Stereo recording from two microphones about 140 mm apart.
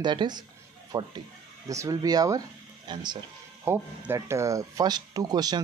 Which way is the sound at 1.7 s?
25° right (ahead or behind).